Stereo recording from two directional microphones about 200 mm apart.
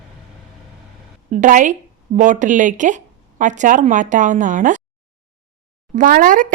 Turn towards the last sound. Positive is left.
turn(degrees=-40)  # may be behind; listen again after turning